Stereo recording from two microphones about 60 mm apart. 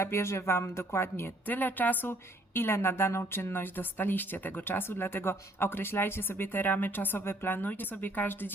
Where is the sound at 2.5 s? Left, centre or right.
Left.